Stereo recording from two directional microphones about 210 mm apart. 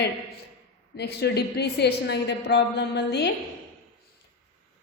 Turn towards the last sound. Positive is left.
turn(degrees=55)  # may be behind; listen again after turning